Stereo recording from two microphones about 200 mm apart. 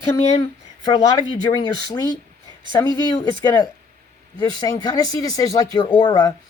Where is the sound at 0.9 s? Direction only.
20° left (ahead or behind).